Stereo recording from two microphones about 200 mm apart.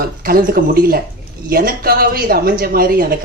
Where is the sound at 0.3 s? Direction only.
50° right (ahead or behind).